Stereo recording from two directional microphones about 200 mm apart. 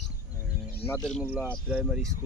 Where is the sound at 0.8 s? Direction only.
5° left (ahead or behind).